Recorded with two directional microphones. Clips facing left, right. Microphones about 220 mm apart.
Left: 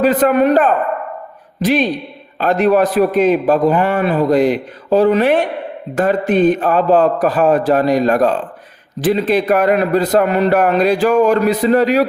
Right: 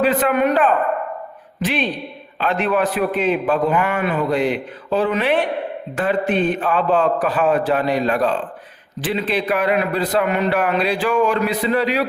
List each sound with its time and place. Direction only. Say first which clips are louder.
0.0 s a man's voice: left 5 dB; 40° left (ahead or behind)